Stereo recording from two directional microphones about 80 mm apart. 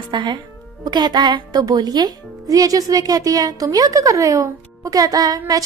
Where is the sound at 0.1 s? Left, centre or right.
Right.